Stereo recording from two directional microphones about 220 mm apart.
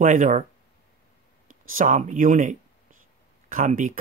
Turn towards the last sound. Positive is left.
turn(degrees=-35)  # may be behind; listen again after turning